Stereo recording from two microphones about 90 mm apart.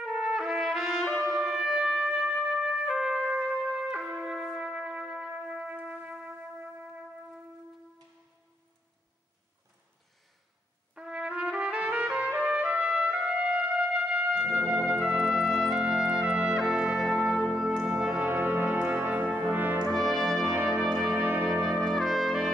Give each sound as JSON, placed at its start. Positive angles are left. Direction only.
{"t": 0.0, "sound": "trumpet", "side_deg": -10}
{"t": 4.3, "sound": "music", "side_deg": -10}
{"t": 11.0, "sound": "trumpet", "side_deg": -10}
{"t": 17.0, "sound": "brass instrument", "side_deg": 0}
{"t": 19.9, "sound": "brass instrument", "side_deg": 5}
{"t": 20.4, "sound": "music", "side_deg": -30}
{"t": 21.1, "sound": "brass instrument", "side_deg": -25}
{"t": 21.6, "sound": "trumpet", "side_deg": 0}